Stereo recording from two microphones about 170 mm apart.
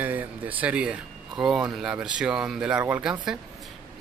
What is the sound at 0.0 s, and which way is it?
A man's voice, 10° right (ahead or behind).